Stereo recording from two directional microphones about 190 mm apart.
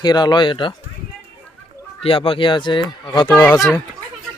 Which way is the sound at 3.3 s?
5° left (ahead or behind).